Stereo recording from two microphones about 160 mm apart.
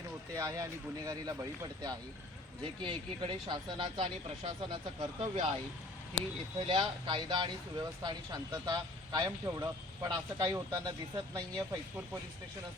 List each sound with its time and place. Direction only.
0.3 s speech: 20° right (ahead or behind)
6.7 s speech: 30° right (ahead or behind)